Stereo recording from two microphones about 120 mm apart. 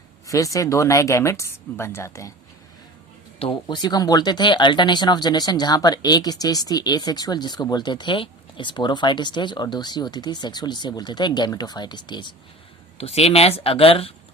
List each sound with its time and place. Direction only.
0.3 s speech: 25° left (ahead or behind)
3.3 s speech: 45° left (ahead or behind)
13.0 s speech: 55° left (ahead or behind)